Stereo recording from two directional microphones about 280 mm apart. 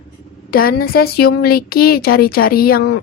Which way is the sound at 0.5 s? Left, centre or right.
Left.